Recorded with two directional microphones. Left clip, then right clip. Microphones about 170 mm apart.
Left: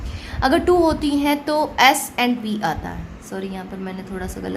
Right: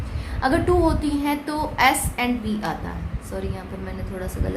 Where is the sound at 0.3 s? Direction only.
45° left (ahead or behind).